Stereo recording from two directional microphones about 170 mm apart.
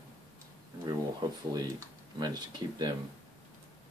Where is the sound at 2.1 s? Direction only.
25° right (ahead or behind).